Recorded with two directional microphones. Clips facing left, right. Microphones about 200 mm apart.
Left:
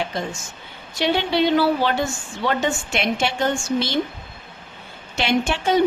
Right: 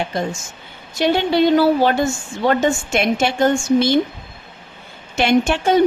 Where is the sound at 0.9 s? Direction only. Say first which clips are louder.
Right 4 dB; 45° right (ahead or behind).